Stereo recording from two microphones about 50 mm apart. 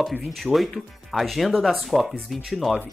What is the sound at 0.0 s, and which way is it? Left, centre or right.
Speech, centre.